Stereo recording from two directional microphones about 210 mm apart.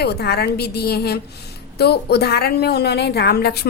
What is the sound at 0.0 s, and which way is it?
A woman's voice, 50° left (ahead or behind).